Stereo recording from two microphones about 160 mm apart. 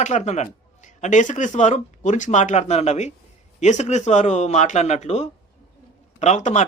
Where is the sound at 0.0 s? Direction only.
45° left (ahead or behind).